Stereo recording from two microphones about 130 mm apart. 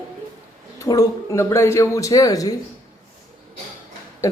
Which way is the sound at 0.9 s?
25° left (ahead or behind).